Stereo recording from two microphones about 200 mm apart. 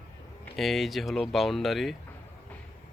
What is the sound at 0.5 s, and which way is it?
Speech, centre (ahead or behind).